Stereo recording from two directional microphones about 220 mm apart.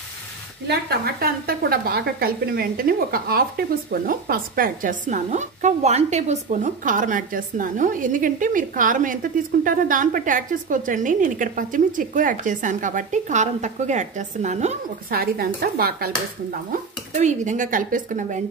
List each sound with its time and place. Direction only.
0.7 s a woman's voice: 45° right (ahead or behind)
17.1 s a woman's voice: 35° right (ahead or behind)